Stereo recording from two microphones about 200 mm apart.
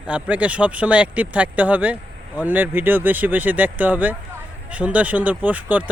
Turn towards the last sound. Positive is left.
turn(degrees=-10)  # may be behind; listen again after turning